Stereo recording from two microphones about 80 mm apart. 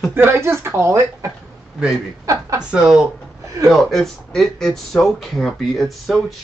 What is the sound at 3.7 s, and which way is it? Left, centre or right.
Speech, centre.